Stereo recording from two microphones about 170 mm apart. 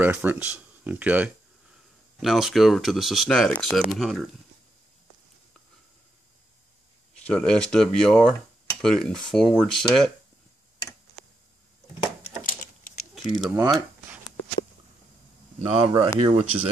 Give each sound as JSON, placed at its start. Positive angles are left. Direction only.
{"t": 0.0, "sound": "speech", "side_deg": -10}
{"t": 7.2, "sound": "speech", "side_deg": 5}
{"t": 12.4, "sound": "a sound", "side_deg": 50}
{"t": 13.1, "sound": "a sound", "side_deg": 0}
{"t": 13.6, "sound": "speech", "side_deg": -20}
{"t": 15.6, "sound": "speech", "side_deg": -35}